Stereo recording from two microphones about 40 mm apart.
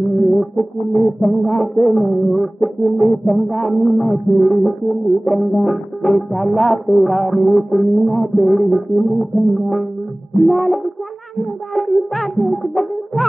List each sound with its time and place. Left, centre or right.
0.1 s music: centre